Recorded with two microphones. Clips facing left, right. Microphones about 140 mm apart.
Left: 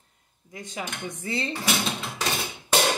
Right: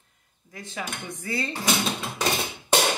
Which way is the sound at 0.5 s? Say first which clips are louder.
Even; 20° left (ahead or behind).